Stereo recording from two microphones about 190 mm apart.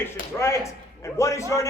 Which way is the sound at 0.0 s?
15° left (ahead or behind).